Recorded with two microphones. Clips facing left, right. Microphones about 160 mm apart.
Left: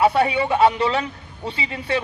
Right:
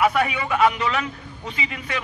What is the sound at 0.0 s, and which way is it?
A man's voice, 30° left (ahead or behind).